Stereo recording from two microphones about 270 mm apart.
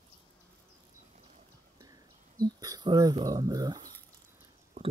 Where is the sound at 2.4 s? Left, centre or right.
Centre.